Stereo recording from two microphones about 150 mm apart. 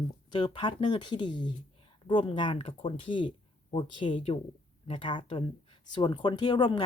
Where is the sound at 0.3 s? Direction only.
30° left (ahead or behind).